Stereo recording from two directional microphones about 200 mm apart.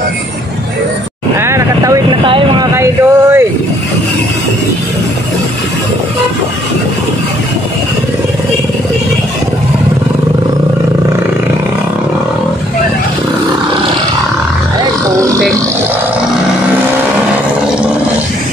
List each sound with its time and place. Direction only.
1.4 s vehicle: 15° right (ahead or behind)